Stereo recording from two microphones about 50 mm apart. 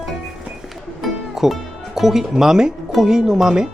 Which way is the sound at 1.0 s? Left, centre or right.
Centre.